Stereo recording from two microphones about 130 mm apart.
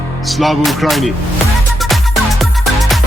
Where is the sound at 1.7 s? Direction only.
Centre (ahead or behind).